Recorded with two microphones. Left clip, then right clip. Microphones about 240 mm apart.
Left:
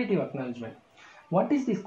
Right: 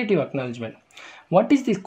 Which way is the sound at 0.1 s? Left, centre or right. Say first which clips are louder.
Right 7 dB; right.